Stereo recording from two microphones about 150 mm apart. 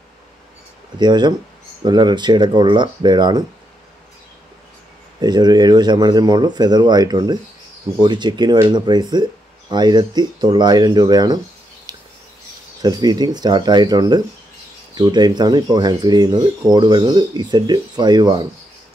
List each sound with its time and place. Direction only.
0.9 s speech: 30° right (ahead or behind)
5.2 s speech: 25° right (ahead or behind)
12.8 s speech: 25° right (ahead or behind)